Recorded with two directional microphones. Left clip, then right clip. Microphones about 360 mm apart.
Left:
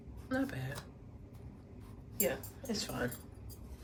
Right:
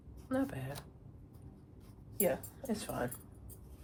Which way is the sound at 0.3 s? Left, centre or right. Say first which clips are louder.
Even; centre.